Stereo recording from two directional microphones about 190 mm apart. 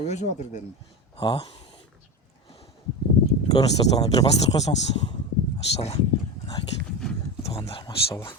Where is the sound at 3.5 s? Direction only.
20° left (ahead or behind).